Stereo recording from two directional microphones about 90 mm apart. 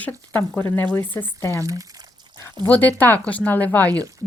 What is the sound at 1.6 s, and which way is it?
Speech, 40° right (ahead or behind).